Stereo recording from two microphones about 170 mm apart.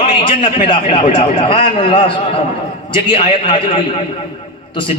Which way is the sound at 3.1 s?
30° left (ahead or behind).